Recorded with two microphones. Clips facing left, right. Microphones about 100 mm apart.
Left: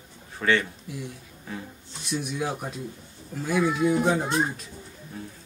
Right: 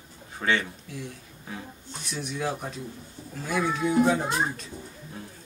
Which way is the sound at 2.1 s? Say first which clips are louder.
Left 5 dB; 15° left (ahead or behind).